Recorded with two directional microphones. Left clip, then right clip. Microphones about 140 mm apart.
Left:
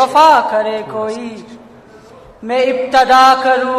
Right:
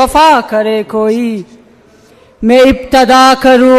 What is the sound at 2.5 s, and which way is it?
Speech, 40° right (ahead or behind).